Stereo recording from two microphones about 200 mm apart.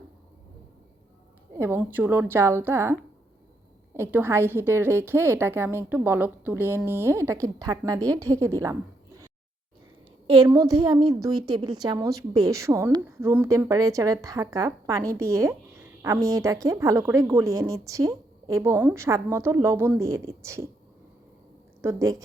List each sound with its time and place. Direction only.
1.5 s a woman's voice: 10° right (ahead or behind)
21.8 s a woman's voice: 15° right (ahead or behind)